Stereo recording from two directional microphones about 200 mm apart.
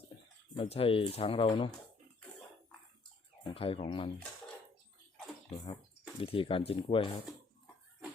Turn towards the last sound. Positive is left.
turn(degrees=25)  # may be behind; listen again after turning